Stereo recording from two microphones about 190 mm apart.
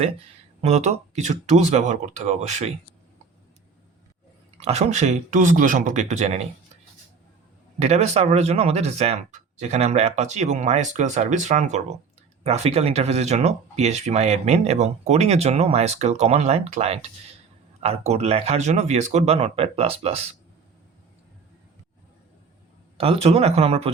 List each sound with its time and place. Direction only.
0.6 s speech: 35° right (ahead or behind)
4.6 s speech: 35° right (ahead or behind)
7.8 s speech: 35° right (ahead or behind)
23.0 s speech: 30° right (ahead or behind)